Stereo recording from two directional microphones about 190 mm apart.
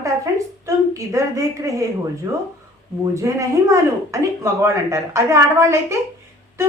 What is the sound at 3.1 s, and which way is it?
Speech, 15° right (ahead or behind).